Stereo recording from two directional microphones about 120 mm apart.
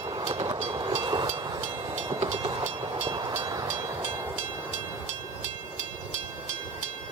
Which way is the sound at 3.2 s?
30° right (ahead or behind).